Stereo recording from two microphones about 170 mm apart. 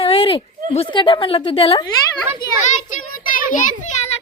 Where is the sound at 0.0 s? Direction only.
35° left (ahead or behind).